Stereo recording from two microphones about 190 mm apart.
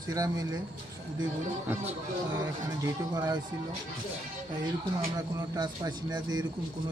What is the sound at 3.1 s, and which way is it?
Speech, 20° right (ahead or behind).